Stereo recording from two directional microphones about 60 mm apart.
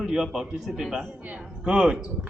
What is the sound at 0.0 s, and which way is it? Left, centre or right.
A man's voice, centre.